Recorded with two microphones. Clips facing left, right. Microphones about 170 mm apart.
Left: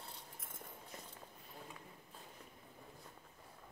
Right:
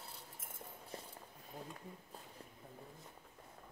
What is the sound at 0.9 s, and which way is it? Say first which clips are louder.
Walk: right 5 dB; 30° right (ahead or behind).